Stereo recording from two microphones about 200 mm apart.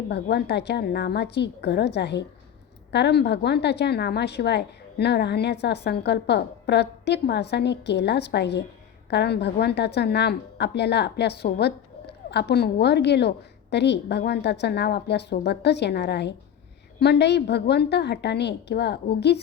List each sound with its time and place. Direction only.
0.1 s a woman's voice: 55° left (ahead or behind)